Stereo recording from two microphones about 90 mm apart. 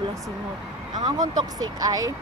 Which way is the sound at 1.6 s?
45° right (ahead or behind).